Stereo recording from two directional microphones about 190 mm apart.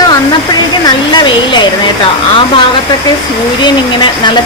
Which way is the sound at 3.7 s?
25° left (ahead or behind).